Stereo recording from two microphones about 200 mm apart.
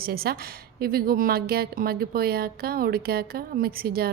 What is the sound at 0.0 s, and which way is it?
A woman's voice, 50° right (ahead or behind).